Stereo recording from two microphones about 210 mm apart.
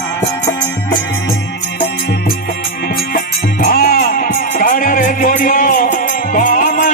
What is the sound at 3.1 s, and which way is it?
Music, 45° left (ahead or behind).